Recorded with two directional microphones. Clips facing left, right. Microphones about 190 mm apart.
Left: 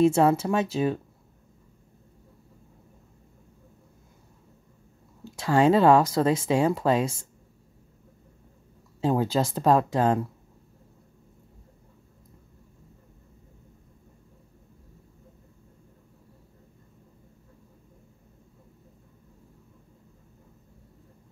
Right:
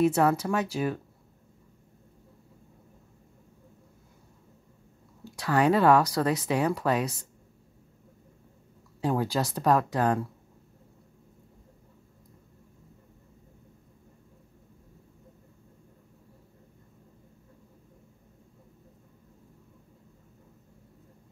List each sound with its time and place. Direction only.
0.0 s speech: 25° left (ahead or behind)
5.2 s speech: 25° left (ahead or behind)
9.0 s speech: 20° left (ahead or behind)